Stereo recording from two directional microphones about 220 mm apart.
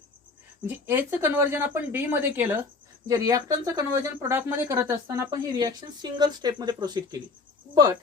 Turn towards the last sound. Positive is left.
turn(degrees=-20)  # may be behind; listen again after turning